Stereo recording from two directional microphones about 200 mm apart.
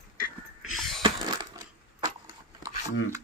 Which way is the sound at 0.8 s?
Centre (ahead or behind).